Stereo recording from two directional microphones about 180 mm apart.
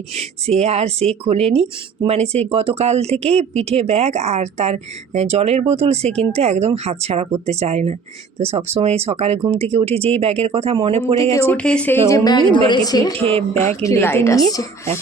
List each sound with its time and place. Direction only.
0.2 s speech: 35° right (ahead or behind)
11.4 s a woman's voice: 5° left (ahead or behind)
13.1 s speech: 30° right (ahead or behind)
13.8 s speech: 15° left (ahead or behind)